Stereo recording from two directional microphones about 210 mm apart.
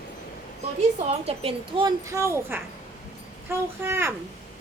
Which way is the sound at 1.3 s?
25° right (ahead or behind).